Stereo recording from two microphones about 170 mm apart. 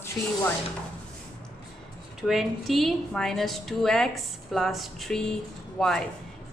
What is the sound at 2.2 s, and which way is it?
A woman's voice, centre (ahead or behind).